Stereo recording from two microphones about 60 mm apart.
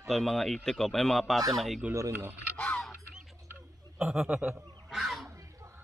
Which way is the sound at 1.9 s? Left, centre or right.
Right.